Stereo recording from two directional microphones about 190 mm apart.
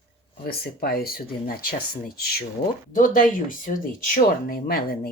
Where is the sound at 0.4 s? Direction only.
55° left (ahead or behind).